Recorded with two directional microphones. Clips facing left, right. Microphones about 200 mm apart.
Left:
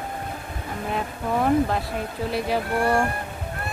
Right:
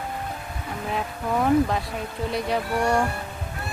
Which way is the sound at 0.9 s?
Centre (ahead or behind).